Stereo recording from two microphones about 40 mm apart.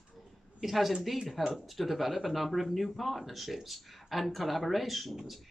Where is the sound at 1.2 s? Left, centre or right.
Centre.